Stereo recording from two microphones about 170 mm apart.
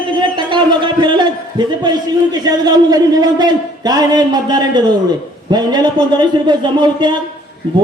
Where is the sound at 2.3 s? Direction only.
25° right (ahead or behind).